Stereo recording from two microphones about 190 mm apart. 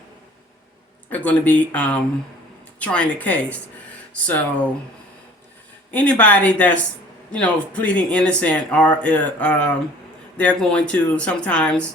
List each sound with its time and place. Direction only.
1.1 s speech: 5° left (ahead or behind)
5.9 s speech: 10° left (ahead or behind)